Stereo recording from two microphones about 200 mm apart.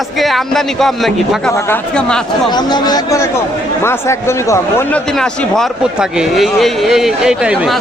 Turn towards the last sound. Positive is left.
turn(degrees=-5)  # may be behind; listen again after turning